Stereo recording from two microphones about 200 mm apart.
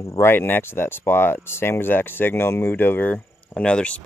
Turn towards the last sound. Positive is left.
turn(degrees=5)  # may be behind; listen again after turning